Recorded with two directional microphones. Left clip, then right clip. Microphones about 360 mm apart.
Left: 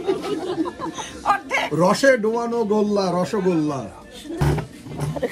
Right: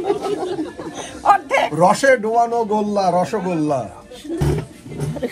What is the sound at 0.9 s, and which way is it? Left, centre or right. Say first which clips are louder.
Speech: right 7 dB; centre.